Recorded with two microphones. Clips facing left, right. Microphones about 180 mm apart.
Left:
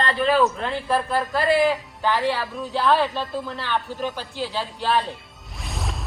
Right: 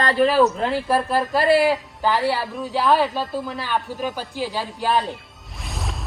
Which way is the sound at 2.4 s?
Centre (ahead or behind).